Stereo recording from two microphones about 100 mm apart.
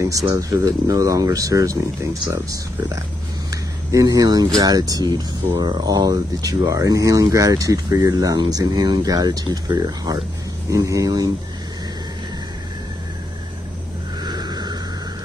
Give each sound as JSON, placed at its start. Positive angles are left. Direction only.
{"t": 0.3, "sound": "speech", "side_deg": -35}
{"t": 3.9, "sound": "speech", "side_deg": -40}
{"t": 14.2, "sound": "vehicle", "side_deg": -45}